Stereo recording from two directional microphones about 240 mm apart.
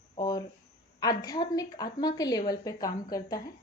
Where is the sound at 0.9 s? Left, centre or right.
Centre.